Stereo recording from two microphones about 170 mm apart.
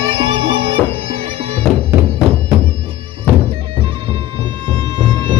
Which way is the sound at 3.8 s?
35° right (ahead or behind).